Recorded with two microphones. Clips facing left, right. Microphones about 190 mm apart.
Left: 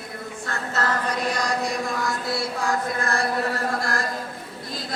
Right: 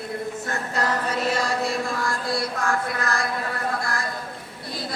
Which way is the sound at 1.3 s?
15° left (ahead or behind).